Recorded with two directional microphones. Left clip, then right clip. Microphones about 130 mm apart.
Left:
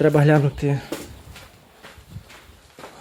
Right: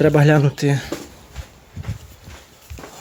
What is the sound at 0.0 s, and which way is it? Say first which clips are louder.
Speech: right 2 dB; 15° right (ahead or behind).